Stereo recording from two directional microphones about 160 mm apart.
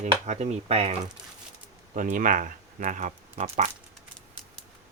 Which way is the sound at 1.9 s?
55° right (ahead or behind).